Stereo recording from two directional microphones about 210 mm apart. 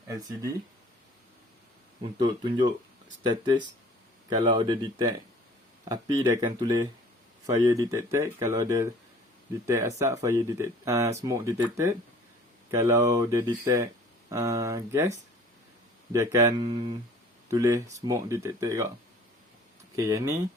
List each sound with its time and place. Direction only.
2.1 s speech: 20° right (ahead or behind)
20.0 s speech: 15° right (ahead or behind)